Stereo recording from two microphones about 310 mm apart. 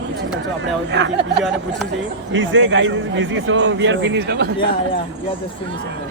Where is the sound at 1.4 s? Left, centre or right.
Centre.